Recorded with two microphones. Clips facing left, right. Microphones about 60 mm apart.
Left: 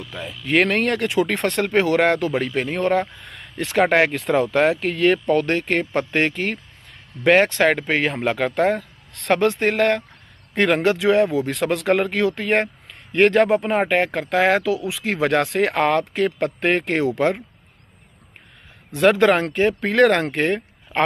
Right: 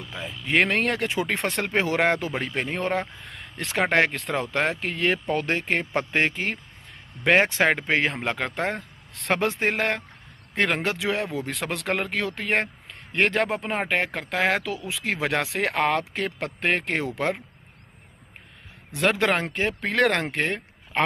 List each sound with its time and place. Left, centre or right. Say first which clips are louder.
0.1 s speech: left 4 dB; centre
18.9 s speech: left 7 dB; centre